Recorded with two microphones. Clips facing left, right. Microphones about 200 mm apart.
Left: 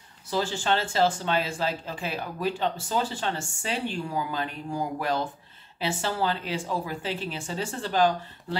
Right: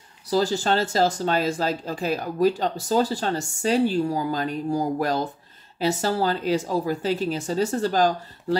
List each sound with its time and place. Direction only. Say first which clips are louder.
0.3 s speech: right 5 dB; 40° right (ahead or behind)